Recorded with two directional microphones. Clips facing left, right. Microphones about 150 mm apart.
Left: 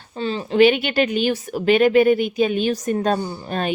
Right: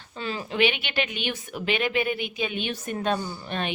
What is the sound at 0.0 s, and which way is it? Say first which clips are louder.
A woman's voice: left 7 dB; 35° left (ahead or behind).